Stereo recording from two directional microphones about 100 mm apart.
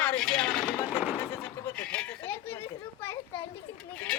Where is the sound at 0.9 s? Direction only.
15° right (ahead or behind).